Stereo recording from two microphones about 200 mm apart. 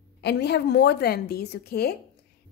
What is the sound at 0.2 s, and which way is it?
A woman's voice, 55° left (ahead or behind).